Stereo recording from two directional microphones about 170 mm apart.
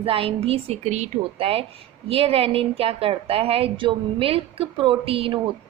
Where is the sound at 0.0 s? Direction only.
35° right (ahead or behind).